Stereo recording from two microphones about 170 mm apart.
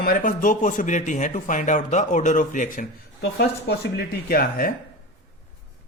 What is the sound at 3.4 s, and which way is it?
Speech, 70° left (ahead or behind).